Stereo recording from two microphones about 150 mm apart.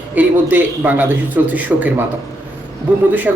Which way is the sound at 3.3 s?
15° right (ahead or behind).